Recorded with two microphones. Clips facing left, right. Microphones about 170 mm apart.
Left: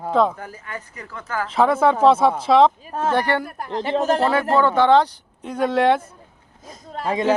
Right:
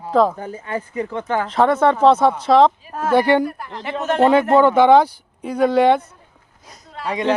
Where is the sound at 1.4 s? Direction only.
5° left (ahead or behind).